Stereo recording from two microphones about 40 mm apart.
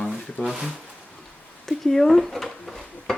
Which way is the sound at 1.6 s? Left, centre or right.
Centre.